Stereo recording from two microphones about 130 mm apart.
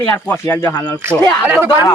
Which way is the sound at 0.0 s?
15° left (ahead or behind).